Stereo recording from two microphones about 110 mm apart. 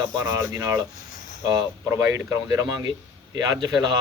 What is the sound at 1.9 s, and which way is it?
Speech, 25° right (ahead or behind).